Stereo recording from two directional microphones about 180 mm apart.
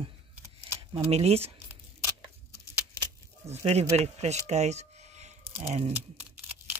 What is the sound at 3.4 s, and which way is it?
Speech, 35° right (ahead or behind).